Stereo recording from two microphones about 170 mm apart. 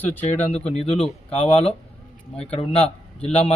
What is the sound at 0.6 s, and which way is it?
A man's voice, 35° left (ahead or behind).